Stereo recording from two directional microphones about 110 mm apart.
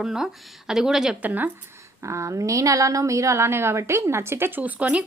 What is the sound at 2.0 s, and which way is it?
A woman's voice, 30° right (ahead or behind).